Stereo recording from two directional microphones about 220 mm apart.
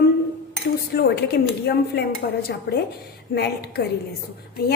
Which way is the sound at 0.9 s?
45° left (ahead or behind).